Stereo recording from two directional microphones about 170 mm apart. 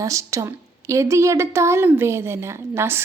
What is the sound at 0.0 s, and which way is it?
A woman's voice, 20° right (ahead or behind).